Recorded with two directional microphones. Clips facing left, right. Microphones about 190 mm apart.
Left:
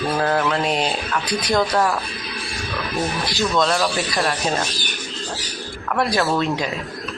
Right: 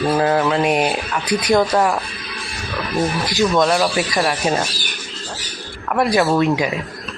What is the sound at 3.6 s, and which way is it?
Speech, 15° right (ahead or behind).